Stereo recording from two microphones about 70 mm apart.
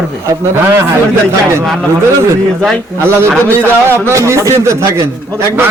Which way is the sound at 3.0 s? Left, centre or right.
Right.